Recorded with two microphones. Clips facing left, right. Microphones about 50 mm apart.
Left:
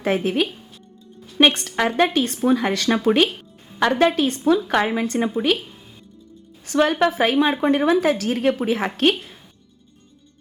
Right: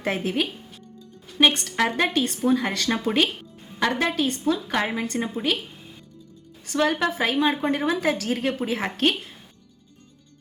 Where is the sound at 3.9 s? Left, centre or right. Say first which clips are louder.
Left 6 dB; centre.